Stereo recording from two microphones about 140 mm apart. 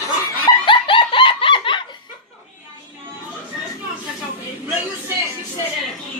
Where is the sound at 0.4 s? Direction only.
35° left (ahead or behind).